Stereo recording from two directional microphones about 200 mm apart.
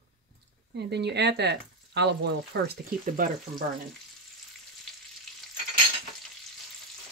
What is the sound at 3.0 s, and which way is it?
Speech, 45° right (ahead or behind).